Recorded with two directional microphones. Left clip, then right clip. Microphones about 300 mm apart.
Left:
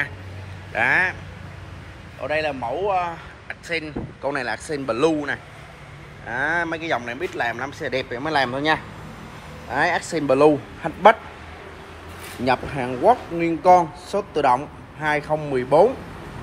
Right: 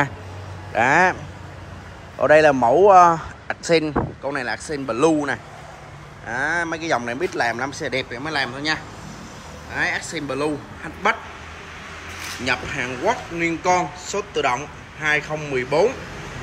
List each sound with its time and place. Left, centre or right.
0.7 s speech: centre
2.2 s a man's voice: right
3.4 s speech: centre
4.2 s speech: centre
9.8 s speech: centre
12.4 s a man's voice: centre